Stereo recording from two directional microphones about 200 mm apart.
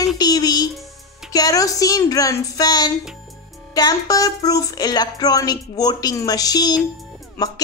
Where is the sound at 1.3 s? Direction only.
15° left (ahead or behind).